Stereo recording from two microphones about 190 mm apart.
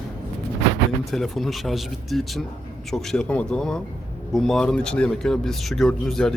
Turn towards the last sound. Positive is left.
turn(degrees=5)  # may be behind; listen again after turning